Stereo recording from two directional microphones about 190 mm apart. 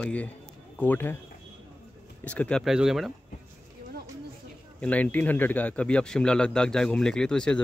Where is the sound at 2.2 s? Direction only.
5° left (ahead or behind).